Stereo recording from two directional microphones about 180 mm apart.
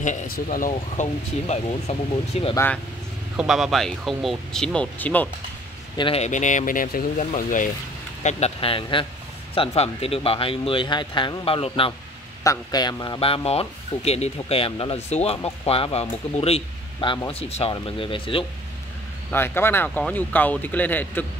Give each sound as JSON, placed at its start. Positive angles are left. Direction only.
{"t": 0.0, "sound": "speech", "side_deg": 45}
{"t": 1.5, "sound": "a man's voice", "side_deg": 35}
{"t": 2.5, "sound": "speech", "side_deg": 10}
{"t": 3.3, "sound": "speech", "side_deg": 0}
{"t": 5.9, "sound": "a man's voice", "side_deg": 30}
{"t": 19.3, "sound": "speech", "side_deg": 10}